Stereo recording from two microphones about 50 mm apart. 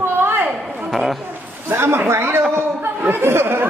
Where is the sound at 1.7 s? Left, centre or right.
Right.